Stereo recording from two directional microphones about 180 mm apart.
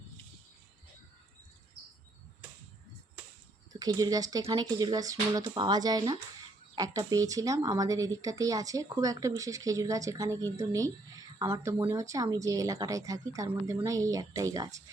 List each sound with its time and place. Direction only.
3.7 s speech: 20° right (ahead or behind)